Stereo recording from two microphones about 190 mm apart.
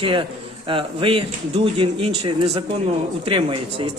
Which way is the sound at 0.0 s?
25° right (ahead or behind).